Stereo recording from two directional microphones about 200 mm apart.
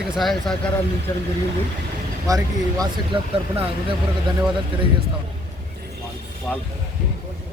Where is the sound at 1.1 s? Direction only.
15° left (ahead or behind).